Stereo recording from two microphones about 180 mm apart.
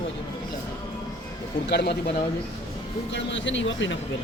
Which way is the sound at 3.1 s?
85° left.